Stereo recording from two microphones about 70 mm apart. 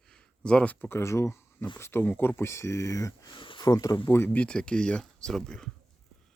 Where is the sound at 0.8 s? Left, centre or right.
Left.